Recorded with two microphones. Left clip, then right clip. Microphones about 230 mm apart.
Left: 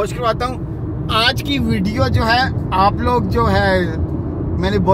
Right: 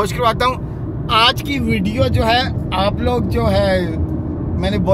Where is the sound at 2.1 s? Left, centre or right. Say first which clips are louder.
Left 2 dB; centre.